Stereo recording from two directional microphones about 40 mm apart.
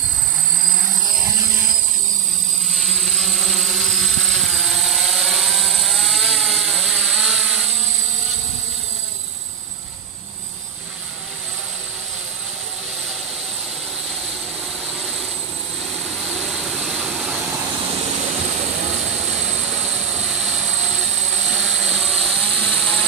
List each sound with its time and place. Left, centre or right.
2.7 s vehicle: centre
3.6 s a sound: centre
7.1 s vehicle: centre
16.1 s vehicle: centre
20.2 s helicopter: centre
22.4 s vehicle: left
22.7 s vehicle: left